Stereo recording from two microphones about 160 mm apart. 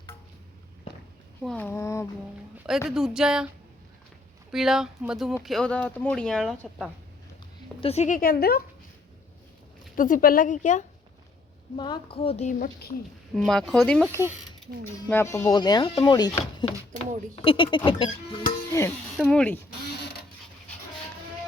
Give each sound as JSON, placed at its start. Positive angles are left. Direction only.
{"t": 1.5, "sound": "a sound", "side_deg": 10}
{"t": 2.6, "sound": "speech", "side_deg": -5}
{"t": 4.5, "sound": "speech", "side_deg": -5}
{"t": 7.8, "sound": "a woman's voice", "side_deg": 40}
{"t": 9.9, "sound": "a woman's voice", "side_deg": 60}
{"t": 11.8, "sound": "a woman's voice", "side_deg": 30}
{"t": 13.3, "sound": "speech", "side_deg": 5}
{"t": 15.1, "sound": "a woman's voice", "side_deg": 20}
{"t": 18.7, "sound": "music", "side_deg": 15}
{"t": 19.1, "sound": "speech", "side_deg": 5}